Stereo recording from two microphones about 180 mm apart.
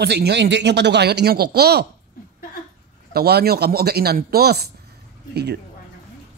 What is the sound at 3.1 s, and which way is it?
Speech, 60° right (ahead or behind).